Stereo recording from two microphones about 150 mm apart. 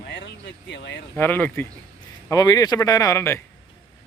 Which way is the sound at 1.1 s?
15° left (ahead or behind).